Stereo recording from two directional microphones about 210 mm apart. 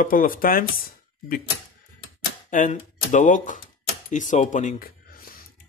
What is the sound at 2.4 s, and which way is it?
Speech, 40° left (ahead or behind).